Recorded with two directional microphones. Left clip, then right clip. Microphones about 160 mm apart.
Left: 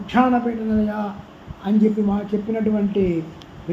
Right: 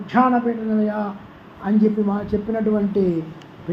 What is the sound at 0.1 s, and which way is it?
Speech, 15° left (ahead or behind).